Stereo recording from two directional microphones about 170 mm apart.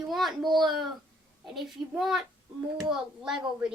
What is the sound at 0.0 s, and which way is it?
A child's voice, centre (ahead or behind).